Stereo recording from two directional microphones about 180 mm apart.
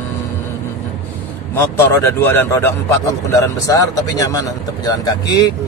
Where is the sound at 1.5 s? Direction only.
15° left (ahead or behind).